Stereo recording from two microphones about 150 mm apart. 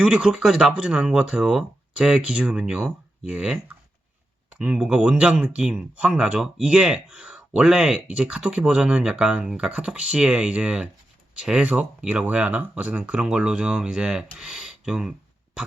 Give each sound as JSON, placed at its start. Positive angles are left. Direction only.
{"t": 0.0, "sound": "speech", "side_deg": -5}